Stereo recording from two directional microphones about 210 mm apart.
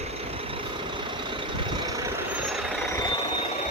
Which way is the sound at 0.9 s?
25° right (ahead or behind).